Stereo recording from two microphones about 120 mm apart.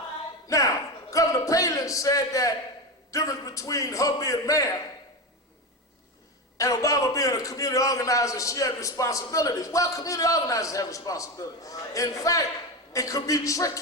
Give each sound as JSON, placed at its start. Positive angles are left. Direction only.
{"t": 0.4, "sound": "a sound", "side_deg": 30}
{"t": 3.1, "sound": "a man's voice", "side_deg": 30}
{"t": 6.6, "sound": "a man's voice", "side_deg": 30}